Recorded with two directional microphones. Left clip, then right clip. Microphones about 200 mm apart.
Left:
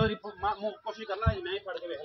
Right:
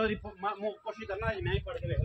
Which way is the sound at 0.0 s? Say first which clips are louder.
Left 2 dB; 5° right (ahead or behind).